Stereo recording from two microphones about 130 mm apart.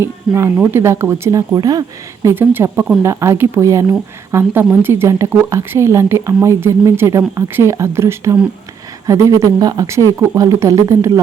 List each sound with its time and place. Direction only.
0.0 s speech: 20° right (ahead or behind)
2.2 s speech: 15° right (ahead or behind)